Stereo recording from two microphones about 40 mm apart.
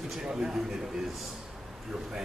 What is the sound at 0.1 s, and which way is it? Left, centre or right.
Speech, centre.